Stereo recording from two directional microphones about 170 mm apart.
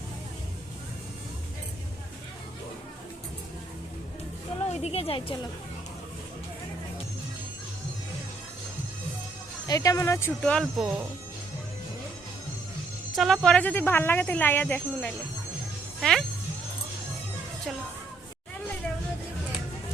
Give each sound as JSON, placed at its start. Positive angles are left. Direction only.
{"t": 4.7, "sound": "a woman's voice", "side_deg": 40}
{"t": 9.6, "sound": "speech", "side_deg": 20}
{"t": 13.1, "sound": "speech", "side_deg": 0}